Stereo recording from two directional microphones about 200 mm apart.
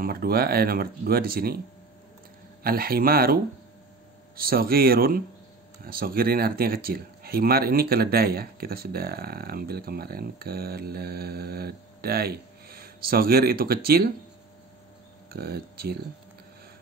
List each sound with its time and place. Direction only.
0.0 s speech: 50° right (ahead or behind)
2.6 s speech: 50° right (ahead or behind)
4.4 s speech: 50° right (ahead or behind)
15.3 s speech: 50° right (ahead or behind)